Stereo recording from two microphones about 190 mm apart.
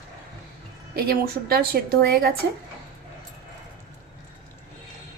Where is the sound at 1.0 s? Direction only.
55° right (ahead or behind).